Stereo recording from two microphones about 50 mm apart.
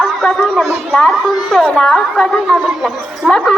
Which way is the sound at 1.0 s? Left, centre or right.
Centre.